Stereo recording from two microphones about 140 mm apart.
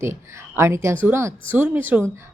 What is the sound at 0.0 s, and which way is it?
A woman's voice, 20° right (ahead or behind).